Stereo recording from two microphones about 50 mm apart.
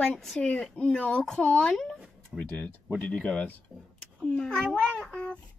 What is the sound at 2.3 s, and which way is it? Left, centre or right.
Speech, centre.